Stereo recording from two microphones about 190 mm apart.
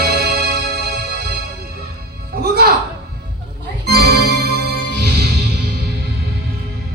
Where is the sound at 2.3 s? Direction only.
55° right (ahead or behind).